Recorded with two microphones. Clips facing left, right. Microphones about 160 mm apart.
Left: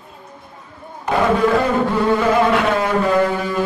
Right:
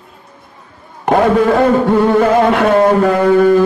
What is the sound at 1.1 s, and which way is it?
Chant, 55° right (ahead or behind).